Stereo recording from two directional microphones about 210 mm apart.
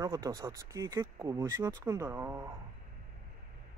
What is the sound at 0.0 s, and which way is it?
Speech, 15° right (ahead or behind).